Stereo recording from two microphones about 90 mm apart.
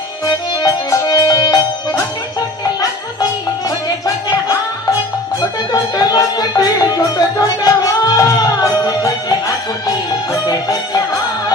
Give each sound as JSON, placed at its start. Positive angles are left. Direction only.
{"t": 0.3, "sound": "music", "side_deg": 40}
{"t": 4.0, "sound": "music", "side_deg": 40}
{"t": 5.9, "sound": "music", "side_deg": 45}
{"t": 10.4, "sound": "music", "side_deg": 45}